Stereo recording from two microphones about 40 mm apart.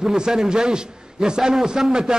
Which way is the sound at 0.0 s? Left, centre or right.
Centre.